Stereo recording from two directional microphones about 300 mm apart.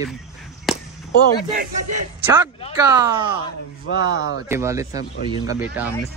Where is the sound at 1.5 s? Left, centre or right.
Right.